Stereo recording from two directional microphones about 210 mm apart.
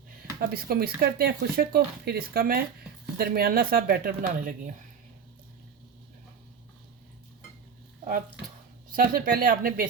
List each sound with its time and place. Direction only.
0.3 s speech: 45° right (ahead or behind)
8.9 s speech: 45° right (ahead or behind)